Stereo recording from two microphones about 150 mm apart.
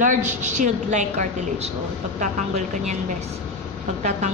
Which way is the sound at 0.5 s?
55° right (ahead or behind).